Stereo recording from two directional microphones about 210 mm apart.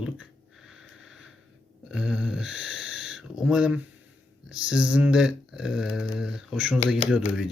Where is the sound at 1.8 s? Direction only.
5° right (ahead or behind).